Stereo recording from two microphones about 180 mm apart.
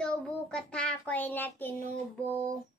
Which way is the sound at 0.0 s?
5° left (ahead or behind).